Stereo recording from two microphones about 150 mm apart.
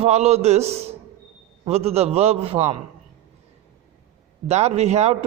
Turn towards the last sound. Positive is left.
turn(degrees=-45)  # may be behind; listen again after turning